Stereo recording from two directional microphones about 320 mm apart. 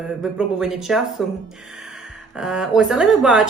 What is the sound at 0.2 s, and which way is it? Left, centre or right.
Speech, centre.